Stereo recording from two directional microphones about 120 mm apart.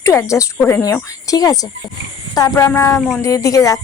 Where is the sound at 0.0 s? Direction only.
25° left (ahead or behind).